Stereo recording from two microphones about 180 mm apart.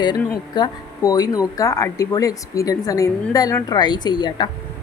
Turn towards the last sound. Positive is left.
turn(degrees=25)  # may be behind; listen again after turning